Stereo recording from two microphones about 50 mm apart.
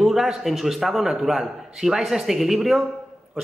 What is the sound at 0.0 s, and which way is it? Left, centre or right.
A man's voice, centre.